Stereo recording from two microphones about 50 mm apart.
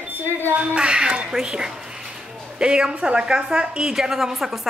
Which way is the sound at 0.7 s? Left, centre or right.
Centre.